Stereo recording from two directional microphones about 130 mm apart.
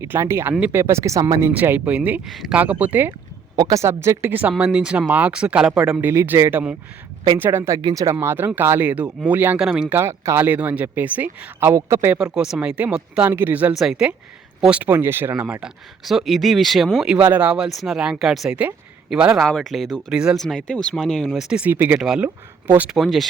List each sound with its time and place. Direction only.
0.0 s speech: 20° right (ahead or behind)
2.2 s speech: centre (ahead or behind)
2.6 s speech: 10° right (ahead or behind)
3.5 s speech: 30° right (ahead or behind)
7.8 s speech: 35° right (ahead or behind)
8.0 s speech: 20° right (ahead or behind)
10.0 s speech: 20° right (ahead or behind)
12.1 s speech: 5° right (ahead or behind)
16.0 s speech: centre (ahead or behind)
21.9 s speech: 5° right (ahead or behind)
22.6 s speech: 15° right (ahead or behind)
22.9 s speech: centre (ahead or behind)